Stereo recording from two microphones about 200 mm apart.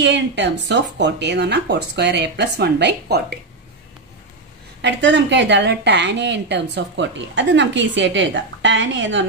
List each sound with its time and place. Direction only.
0.0 s a woman's voice: 60° right (ahead or behind)
4.8 s a woman's voice: 60° right (ahead or behind)